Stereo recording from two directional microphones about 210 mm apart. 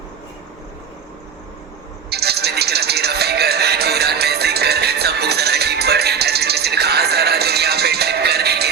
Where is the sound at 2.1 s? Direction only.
50° right (ahead or behind).